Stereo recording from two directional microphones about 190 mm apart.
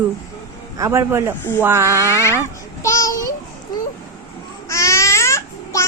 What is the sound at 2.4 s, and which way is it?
Child singing, 15° left (ahead or behind).